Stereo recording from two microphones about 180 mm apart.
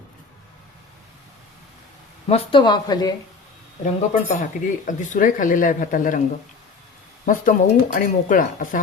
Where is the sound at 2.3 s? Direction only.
30° left (ahead or behind).